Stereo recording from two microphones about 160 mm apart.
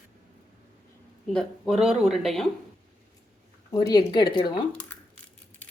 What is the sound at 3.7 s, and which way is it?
Speech, 25° left (ahead or behind).